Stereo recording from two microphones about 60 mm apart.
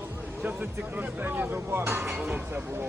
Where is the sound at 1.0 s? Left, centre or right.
Right.